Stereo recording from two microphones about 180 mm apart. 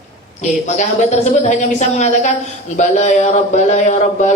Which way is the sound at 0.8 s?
40° left (ahead or behind).